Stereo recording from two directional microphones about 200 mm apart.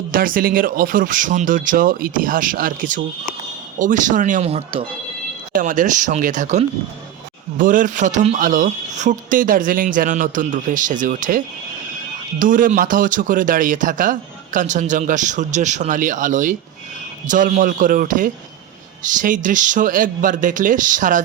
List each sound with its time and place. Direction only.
0.1 s speech: 45° right (ahead or behind); by 4.9 s 30° right (ahead or behind)
5.5 s speech: 40° right (ahead or behind)